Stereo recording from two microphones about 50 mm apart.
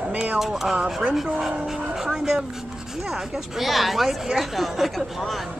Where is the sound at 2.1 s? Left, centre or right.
Centre.